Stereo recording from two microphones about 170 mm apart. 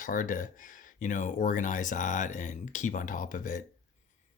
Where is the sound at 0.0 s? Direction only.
50° left (ahead or behind).